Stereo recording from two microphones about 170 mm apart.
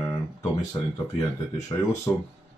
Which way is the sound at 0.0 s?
20° left (ahead or behind).